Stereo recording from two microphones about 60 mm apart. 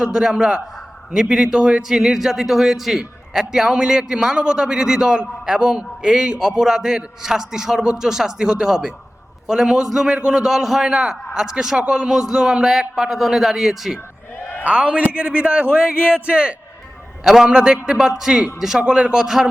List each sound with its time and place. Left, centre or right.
0.0 s a man's voice: centre
14.6 s a man's voice: centre